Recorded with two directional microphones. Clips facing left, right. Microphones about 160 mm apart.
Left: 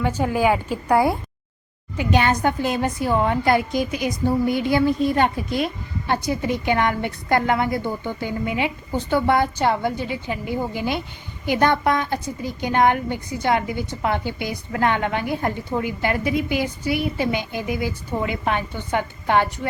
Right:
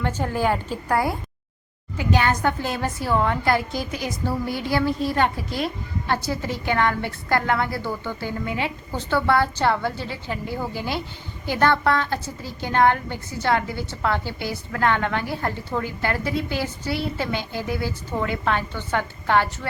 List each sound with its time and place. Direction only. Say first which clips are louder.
0.0 s a woman's voice: left 3 dB; 10° left (ahead or behind)
2.0 s a woman's voice: left 2 dB; 20° left (ahead or behind)